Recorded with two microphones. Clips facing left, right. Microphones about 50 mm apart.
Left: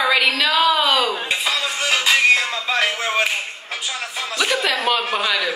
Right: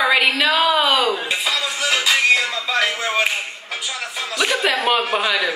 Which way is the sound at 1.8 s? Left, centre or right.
Left.